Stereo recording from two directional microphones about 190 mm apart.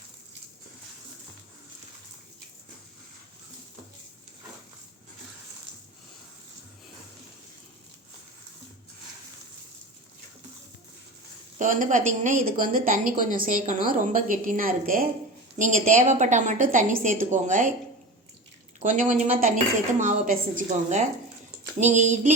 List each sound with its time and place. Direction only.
11.5 s a woman's voice: 40° right (ahead or behind)
18.8 s a woman's voice: 40° right (ahead or behind)